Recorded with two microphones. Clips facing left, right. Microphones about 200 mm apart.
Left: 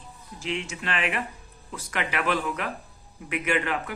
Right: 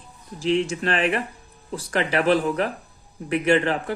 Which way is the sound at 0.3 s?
35° right (ahead or behind).